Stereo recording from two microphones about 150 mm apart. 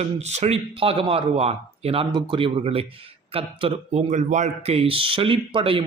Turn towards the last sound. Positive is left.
turn(degrees=-35)  # may be behind; listen again after turning